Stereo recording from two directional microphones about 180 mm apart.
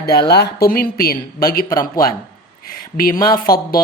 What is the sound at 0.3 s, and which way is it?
Speech, 55° left (ahead or behind).